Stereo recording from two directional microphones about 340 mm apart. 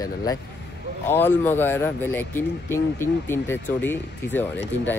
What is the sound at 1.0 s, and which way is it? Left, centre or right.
Speech, centre.